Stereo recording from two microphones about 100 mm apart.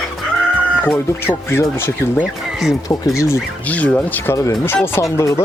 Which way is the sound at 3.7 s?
10° left (ahead or behind).